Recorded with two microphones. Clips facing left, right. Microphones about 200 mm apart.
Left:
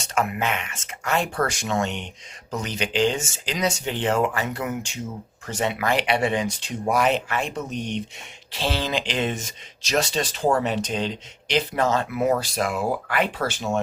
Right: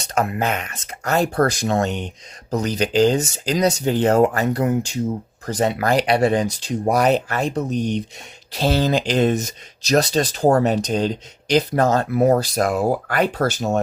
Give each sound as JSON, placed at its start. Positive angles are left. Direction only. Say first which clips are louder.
{"t": 0.0, "sound": "speech", "louder": "right 3 dB", "side_deg": -35}